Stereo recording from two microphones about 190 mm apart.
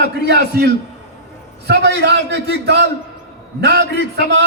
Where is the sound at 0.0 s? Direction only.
60° right (ahead or behind).